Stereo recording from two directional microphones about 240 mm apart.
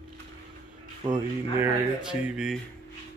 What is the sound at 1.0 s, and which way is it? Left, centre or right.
Speech, centre.